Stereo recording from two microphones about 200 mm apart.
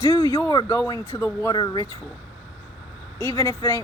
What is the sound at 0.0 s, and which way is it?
Speech, 15° left (ahead or behind).